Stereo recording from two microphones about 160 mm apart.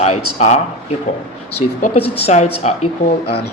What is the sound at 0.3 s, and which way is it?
Speech, 45° left (ahead or behind).